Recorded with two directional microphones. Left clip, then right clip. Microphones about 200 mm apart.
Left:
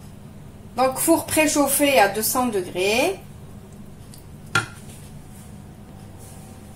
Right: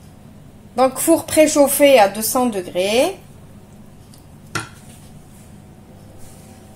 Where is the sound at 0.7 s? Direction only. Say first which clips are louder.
Right 4 dB; 45° right (ahead or behind).